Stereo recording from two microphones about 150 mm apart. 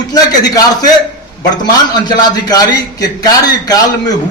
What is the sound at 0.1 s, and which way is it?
A man's voice, 25° left (ahead or behind).